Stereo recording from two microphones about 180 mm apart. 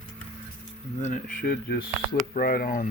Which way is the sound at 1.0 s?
45° left (ahead or behind).